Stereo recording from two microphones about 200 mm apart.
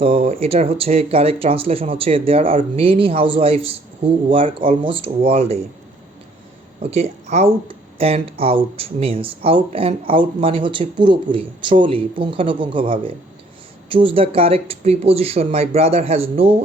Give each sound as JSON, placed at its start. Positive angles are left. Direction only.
{"t": 0.0, "sound": "speech", "side_deg": -30}
{"t": 6.9, "sound": "speech", "side_deg": -35}